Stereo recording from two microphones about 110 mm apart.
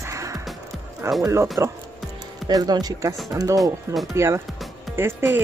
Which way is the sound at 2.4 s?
35° right (ahead or behind).